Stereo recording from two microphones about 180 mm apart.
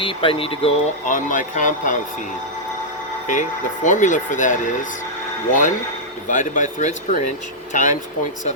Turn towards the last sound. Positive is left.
turn(degrees=45)  # may be behind; listen again after turning